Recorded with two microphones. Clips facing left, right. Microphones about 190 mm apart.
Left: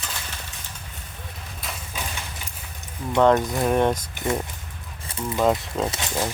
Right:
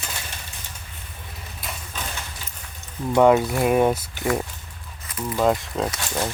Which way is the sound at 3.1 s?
10° right (ahead or behind).